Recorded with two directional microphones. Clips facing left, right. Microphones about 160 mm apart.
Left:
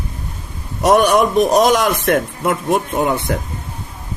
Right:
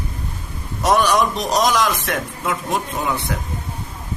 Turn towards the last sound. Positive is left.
turn(degrees=50)  # may be behind; listen again after turning